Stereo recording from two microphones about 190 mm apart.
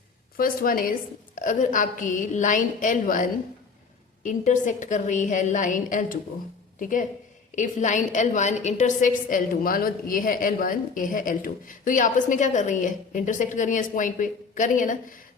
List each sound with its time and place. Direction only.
0.3 s a woman's voice: 50° left (ahead or behind)